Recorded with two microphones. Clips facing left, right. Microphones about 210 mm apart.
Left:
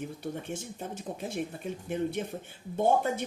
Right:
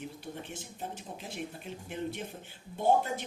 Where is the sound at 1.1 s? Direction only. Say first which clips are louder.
Left 6 dB; 55° left (ahead or behind).